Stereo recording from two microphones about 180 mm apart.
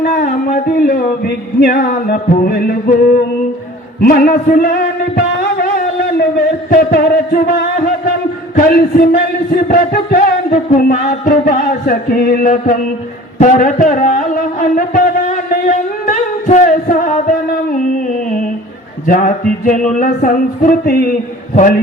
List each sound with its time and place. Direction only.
0.0 s music: 55° left (ahead or behind)
5.4 s a sound: 60° left (ahead or behind)
8.5 s music: 50° left (ahead or behind)
19.0 s music: 45° left (ahead or behind)
21.5 s a man's voice: 45° left (ahead or behind)